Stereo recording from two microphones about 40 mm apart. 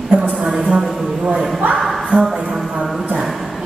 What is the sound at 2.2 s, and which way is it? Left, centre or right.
Speech, centre.